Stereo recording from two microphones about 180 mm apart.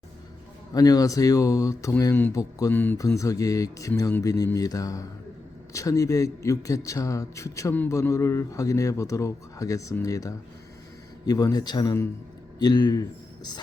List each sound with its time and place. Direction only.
0.7 s a man's voice: 20° left (ahead or behind)